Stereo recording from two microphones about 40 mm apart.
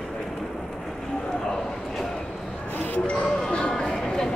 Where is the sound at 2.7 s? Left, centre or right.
Left.